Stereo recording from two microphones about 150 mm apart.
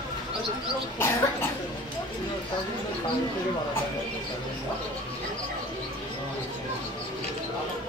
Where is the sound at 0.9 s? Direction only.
15° left (ahead or behind).